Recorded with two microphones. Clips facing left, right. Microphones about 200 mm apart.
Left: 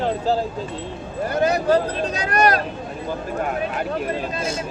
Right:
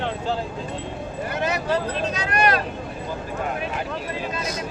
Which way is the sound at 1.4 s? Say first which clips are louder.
Left 6 dB; 40° left (ahead or behind).